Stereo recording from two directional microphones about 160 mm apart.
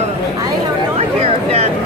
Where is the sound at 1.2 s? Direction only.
40° right (ahead or behind).